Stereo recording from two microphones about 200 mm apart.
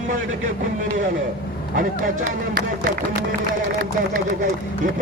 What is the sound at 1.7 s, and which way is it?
Speech, 40° right (ahead or behind).